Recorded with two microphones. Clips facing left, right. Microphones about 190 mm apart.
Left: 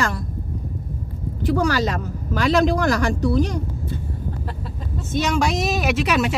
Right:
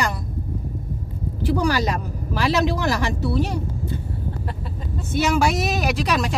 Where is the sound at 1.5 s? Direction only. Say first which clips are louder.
Left 1 dB; 15° right (ahead or behind).